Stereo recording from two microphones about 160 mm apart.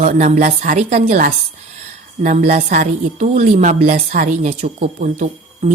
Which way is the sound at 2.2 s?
45° right (ahead or behind).